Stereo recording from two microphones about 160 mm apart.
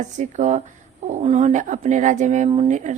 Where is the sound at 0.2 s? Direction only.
50° right (ahead or behind).